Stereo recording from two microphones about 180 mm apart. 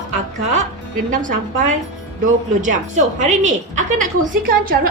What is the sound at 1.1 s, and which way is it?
Speech, 45° right (ahead or behind).